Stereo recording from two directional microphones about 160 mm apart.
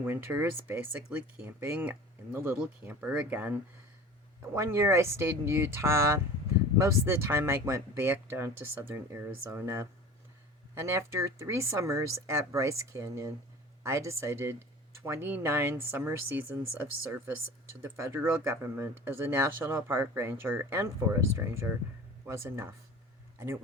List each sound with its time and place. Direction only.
0.0 s speech: 10° right (ahead or behind)